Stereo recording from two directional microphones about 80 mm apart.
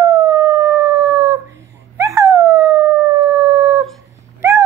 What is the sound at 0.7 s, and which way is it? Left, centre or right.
Howl, right.